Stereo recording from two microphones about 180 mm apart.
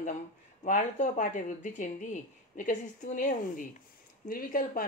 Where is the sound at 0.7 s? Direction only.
45° left (ahead or behind).